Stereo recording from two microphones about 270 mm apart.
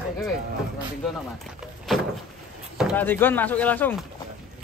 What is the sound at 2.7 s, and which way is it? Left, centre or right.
Speech, centre.